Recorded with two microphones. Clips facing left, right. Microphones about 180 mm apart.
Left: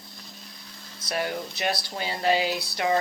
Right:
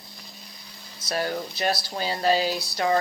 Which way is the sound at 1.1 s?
30° right (ahead or behind).